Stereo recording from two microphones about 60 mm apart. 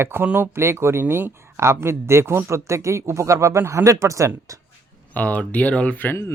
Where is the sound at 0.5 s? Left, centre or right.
Right.